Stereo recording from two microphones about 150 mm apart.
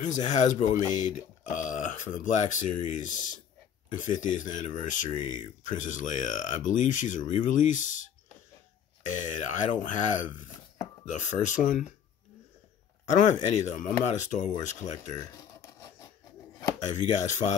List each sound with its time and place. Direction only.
0.0 s speech: 55° left (ahead or behind)
9.0 s speech: 55° left (ahead or behind)
13.0 s speech: 50° left (ahead or behind)
15.1 s a sound: 20° left (ahead or behind)
16.8 s speech: 55° left (ahead or behind)